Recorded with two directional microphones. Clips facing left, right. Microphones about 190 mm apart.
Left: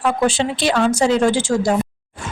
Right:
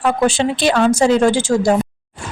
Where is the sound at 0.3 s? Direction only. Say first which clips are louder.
Right 3 dB; 50° right (ahead or behind).